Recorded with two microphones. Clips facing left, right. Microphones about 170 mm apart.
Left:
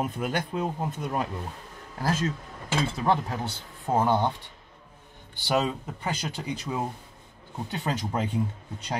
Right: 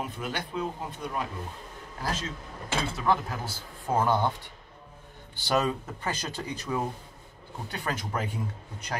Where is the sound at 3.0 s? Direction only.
30° left (ahead or behind).